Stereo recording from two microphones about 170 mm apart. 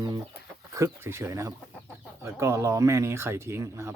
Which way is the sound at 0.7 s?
15° right (ahead or behind).